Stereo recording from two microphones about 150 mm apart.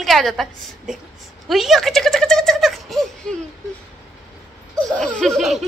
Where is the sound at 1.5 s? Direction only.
Centre (ahead or behind).